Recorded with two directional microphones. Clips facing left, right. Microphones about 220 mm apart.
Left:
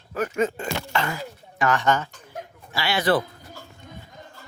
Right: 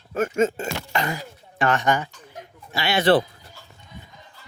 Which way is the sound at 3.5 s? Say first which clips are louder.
Left 2 dB; 50° left (ahead or behind).